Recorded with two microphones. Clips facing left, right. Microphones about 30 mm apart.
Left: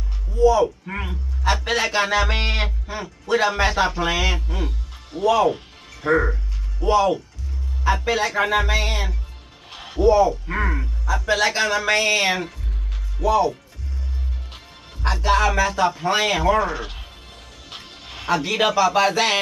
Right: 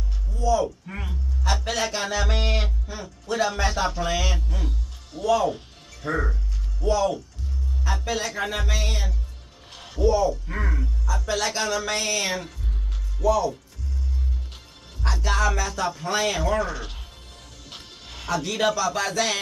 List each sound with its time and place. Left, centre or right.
0.4 s a man's voice: left
14.5 s music: left
18.3 s speech: left